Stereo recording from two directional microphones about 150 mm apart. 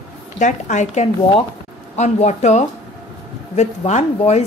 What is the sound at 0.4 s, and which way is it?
A woman's voice, 55° left (ahead or behind).